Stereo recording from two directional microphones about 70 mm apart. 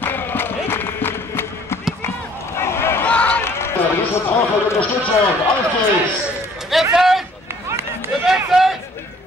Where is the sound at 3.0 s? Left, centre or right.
Centre.